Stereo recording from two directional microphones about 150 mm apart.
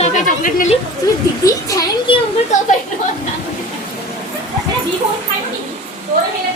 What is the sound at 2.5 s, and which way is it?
Speech, 55° left (ahead or behind).